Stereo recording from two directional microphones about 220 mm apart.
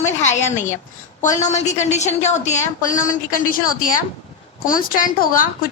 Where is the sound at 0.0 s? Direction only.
30° left (ahead or behind).